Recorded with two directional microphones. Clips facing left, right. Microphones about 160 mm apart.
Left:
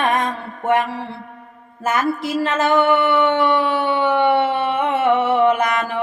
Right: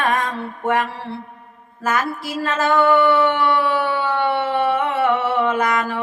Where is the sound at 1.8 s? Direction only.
20° left (ahead or behind).